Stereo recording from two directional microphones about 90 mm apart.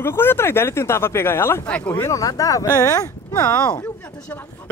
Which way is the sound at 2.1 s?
40° left (ahead or behind).